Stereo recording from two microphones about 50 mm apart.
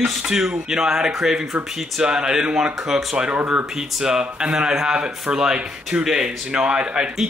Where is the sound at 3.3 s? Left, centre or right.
Right.